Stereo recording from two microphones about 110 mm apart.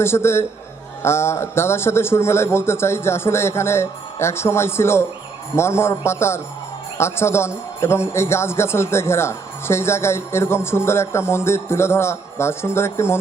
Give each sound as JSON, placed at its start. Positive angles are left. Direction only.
{"t": 0.0, "sound": "a man's voice", "side_deg": 25}